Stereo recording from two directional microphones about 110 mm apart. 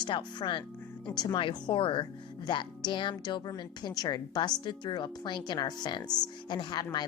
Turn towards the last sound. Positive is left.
turn(degrees=40)  # may be behind; listen again after turning